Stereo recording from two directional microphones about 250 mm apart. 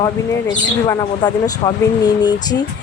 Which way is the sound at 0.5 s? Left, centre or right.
Centre.